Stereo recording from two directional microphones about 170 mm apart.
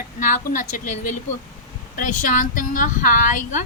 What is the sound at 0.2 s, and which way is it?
A woman's voice, 50° left (ahead or behind).